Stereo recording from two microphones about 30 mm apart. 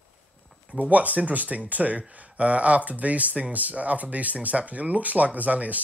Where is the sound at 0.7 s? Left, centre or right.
Right.